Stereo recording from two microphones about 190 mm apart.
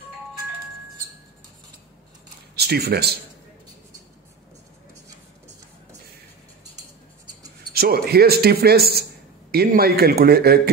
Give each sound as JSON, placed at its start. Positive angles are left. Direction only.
{"t": 2.5, "sound": "speech", "side_deg": -55}
{"t": 7.7, "sound": "speech", "side_deg": -55}